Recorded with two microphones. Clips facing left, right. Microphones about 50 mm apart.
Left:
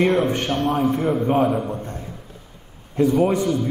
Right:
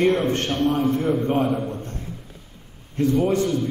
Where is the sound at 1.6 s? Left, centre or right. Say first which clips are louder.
Left 2 dB; centre.